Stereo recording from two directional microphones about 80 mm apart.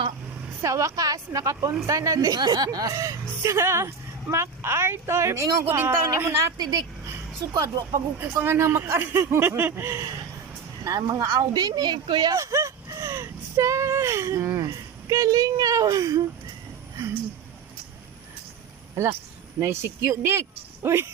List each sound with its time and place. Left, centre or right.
0.6 s a woman's voice: right
5.7 s speech: right
6.6 s speech: right
7.5 s a woman's voice: right
10.8 s speech: right
11.5 s speech: right
12.3 s speech: right
19.5 s a woman's voice: right